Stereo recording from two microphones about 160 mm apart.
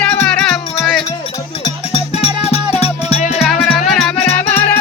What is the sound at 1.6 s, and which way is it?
Music, 40° left (ahead or behind).